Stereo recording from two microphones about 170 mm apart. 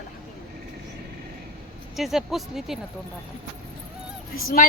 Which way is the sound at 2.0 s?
Centre (ahead or behind).